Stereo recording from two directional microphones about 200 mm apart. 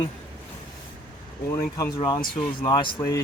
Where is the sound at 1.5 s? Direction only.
15° left (ahead or behind).